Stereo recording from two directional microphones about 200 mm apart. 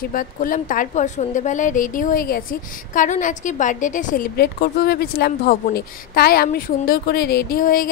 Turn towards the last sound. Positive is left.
turn(degrees=45)  # may be behind; listen again after turning